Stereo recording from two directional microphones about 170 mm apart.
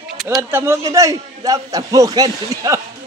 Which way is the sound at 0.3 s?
15° right (ahead or behind).